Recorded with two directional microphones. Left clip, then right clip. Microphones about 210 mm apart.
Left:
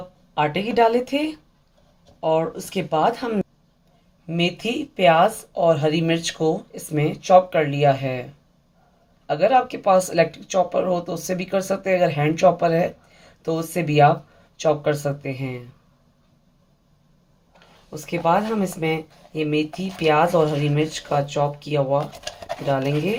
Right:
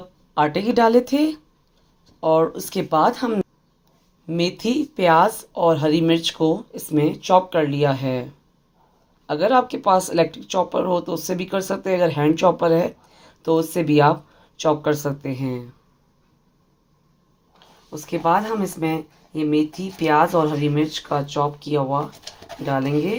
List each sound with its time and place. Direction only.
0.4 s speech: 25° right (ahead or behind)
9.2 s speech: 20° right (ahead or behind)
17.9 s speech: 15° right (ahead or behind)
22.1 s pigeon: 30° left (ahead or behind)
22.6 s speech: 20° right (ahead or behind)